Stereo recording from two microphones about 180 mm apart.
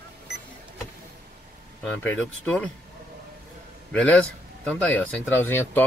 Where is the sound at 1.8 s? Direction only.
10° left (ahead or behind).